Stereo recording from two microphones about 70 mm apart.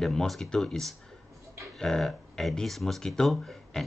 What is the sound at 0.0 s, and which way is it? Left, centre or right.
Speech, centre.